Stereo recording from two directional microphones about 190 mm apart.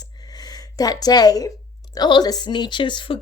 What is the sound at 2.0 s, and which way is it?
A woman's voice, 20° left (ahead or behind).